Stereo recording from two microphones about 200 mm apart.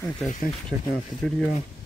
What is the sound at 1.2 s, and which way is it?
Speech, centre (ahead or behind).